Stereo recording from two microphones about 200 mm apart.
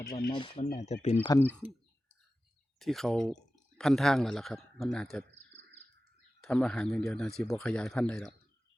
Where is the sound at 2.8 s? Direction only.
Centre (ahead or behind).